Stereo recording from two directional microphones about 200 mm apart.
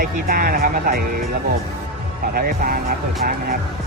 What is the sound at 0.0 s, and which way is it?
Speech, 50° right (ahead or behind).